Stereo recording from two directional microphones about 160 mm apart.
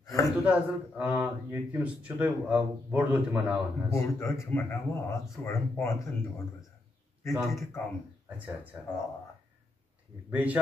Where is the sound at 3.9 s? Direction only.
15° left (ahead or behind).